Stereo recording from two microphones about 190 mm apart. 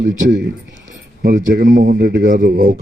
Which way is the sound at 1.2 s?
55° right (ahead or behind).